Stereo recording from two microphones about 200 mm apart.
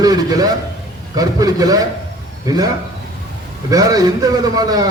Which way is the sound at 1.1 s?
20° right (ahead or behind).